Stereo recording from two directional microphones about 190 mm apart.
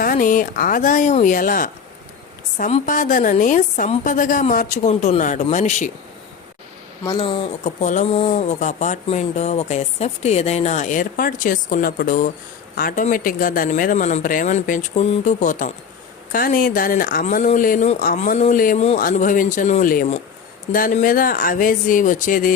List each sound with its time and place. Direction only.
0.0 s speech: 45° left (ahead or behind)
7.2 s speech: 25° left (ahead or behind)
7.6 s speech: 40° left (ahead or behind)